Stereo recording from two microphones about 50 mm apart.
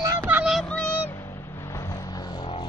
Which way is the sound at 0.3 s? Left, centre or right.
Right.